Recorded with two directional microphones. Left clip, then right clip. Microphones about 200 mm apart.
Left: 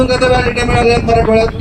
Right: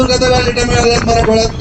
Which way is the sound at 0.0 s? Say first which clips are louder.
Even; 30° left (ahead or behind).